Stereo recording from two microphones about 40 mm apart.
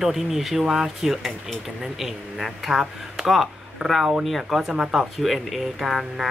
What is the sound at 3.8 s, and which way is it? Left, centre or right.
Speech, right.